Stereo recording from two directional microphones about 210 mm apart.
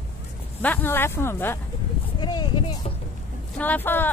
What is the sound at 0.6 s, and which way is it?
Speech, 10° left (ahead or behind).